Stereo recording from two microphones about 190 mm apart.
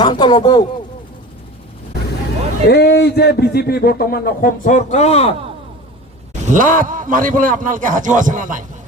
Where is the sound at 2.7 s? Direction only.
60° left (ahead or behind); by 5.3 s 35° left (ahead or behind).